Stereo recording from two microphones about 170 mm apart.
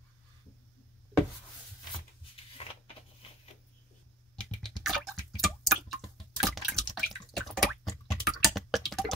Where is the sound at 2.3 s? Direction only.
35° left (ahead or behind).